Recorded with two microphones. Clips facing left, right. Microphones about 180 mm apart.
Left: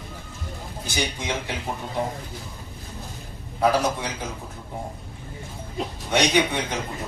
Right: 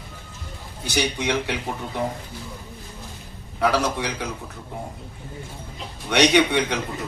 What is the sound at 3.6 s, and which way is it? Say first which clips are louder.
Speech: even; 70° right (ahead or behind).